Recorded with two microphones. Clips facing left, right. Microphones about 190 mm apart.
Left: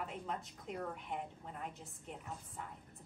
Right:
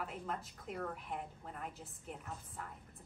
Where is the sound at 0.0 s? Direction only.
Centre (ahead or behind).